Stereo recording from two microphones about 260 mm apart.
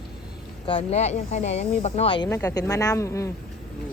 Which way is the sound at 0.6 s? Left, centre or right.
Left.